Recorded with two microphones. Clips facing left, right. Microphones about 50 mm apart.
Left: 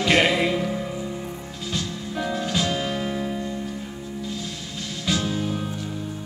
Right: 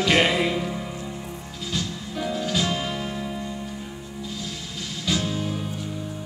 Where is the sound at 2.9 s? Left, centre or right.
Centre.